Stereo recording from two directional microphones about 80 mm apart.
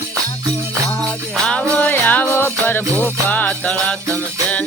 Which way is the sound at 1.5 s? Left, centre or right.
Centre.